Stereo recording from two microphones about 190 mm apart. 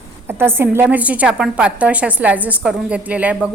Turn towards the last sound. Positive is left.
turn(degrees=-5)  # may be behind; listen again after turning